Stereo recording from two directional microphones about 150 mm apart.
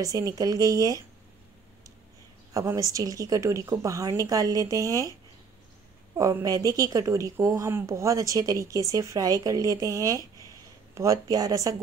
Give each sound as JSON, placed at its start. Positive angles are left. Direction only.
{"t": 0.0, "sound": "a woman's voice", "side_deg": -25}
{"t": 2.5, "sound": "a woman's voice", "side_deg": -20}
{"t": 6.1, "sound": "a woman's voice", "side_deg": -20}